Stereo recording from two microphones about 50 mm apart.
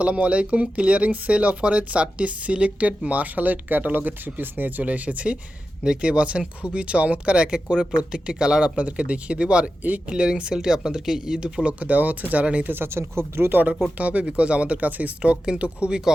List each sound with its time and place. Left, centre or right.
0.0 s speech: right
4.8 s speech: right
5.8 s speech: centre
11.8 s speech: right
12.6 s speech: right
14.0 s speech: right